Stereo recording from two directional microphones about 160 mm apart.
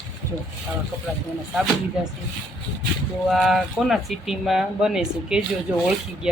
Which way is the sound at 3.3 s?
Centre (ahead or behind).